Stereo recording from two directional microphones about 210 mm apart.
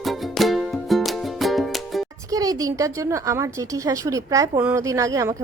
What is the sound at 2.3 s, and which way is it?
A woman's voice, 15° right (ahead or behind).